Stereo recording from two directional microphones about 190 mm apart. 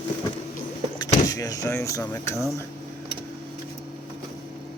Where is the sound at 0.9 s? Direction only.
20° left (ahead or behind).